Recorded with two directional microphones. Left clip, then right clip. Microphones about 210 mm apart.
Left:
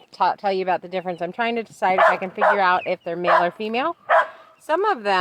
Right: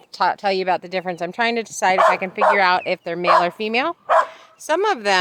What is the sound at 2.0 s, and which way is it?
Speech, 45° right (ahead or behind).